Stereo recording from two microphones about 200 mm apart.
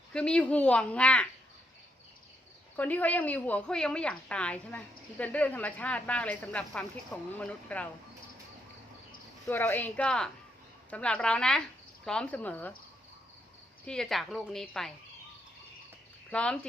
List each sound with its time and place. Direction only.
0.1 s a child's voice: 5° left (ahead or behind)
2.7 s a woman's voice: 10° left (ahead or behind)
9.5 s a woman's voice: 10° left (ahead or behind)
13.8 s a child's voice: 5° left (ahead or behind)
16.3 s a child's voice: 5° left (ahead or behind)